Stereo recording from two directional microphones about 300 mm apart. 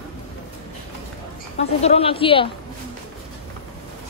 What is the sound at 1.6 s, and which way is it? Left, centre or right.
Speech, left.